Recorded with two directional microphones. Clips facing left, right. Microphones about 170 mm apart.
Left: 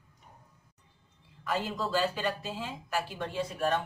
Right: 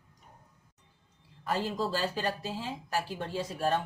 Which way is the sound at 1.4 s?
35° right (ahead or behind).